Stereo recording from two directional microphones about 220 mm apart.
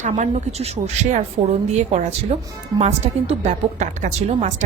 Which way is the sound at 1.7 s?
30° right (ahead or behind).